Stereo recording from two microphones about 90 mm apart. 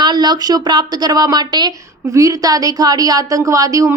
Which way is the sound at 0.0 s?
50° right (ahead or behind).